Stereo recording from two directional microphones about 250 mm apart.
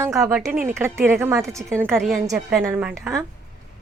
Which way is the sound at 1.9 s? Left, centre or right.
Centre.